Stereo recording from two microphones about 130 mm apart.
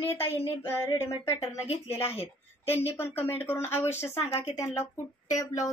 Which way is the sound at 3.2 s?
50° left (ahead or behind).